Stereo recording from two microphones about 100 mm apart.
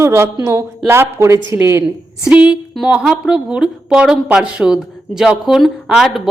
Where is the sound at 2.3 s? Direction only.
10° right (ahead or behind).